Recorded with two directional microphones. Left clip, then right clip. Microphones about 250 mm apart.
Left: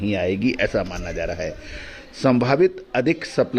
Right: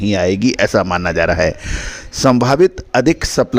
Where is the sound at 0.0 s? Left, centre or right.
Right.